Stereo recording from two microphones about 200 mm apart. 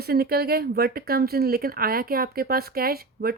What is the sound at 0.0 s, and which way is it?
Speech, 50° right (ahead or behind).